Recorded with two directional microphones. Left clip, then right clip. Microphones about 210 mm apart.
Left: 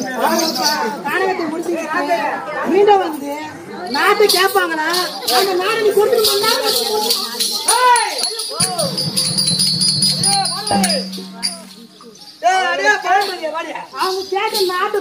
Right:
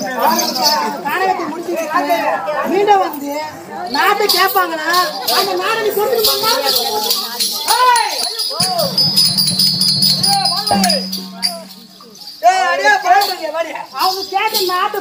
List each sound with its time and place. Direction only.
0.3 s chatter: 5° left (ahead or behind)
2.7 s speech: 5° left (ahead or behind)
7.6 s a sound: 5° left (ahead or behind)
9.4 s music: centre (ahead or behind)
12.4 s a sound: centre (ahead or behind)
13.9 s a woman's voice: 30° right (ahead or behind)